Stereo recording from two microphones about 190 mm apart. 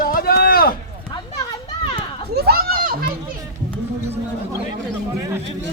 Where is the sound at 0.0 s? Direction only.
50° left (ahead or behind).